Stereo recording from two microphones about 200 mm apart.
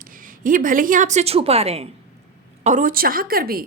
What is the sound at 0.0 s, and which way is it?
A woman's voice, 45° right (ahead or behind).